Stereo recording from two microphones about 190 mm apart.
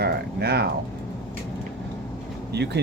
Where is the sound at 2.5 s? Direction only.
60° right (ahead or behind).